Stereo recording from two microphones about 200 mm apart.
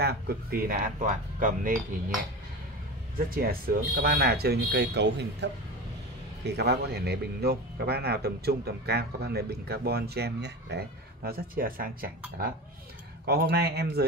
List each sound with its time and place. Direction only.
0.0 s speech: 50° right (ahead or behind)
3.3 s speech: 45° right (ahead or behind)
13.2 s speech: 50° right (ahead or behind)